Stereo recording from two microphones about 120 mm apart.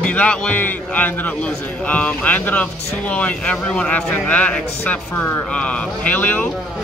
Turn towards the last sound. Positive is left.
turn(degrees=15)  # may be behind; listen again after turning